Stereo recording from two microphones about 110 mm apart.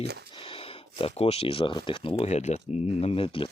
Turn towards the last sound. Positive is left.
turn(degrees=55)  # may be behind; listen again after turning